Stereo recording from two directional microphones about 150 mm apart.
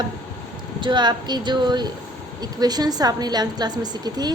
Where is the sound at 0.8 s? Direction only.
30° right (ahead or behind).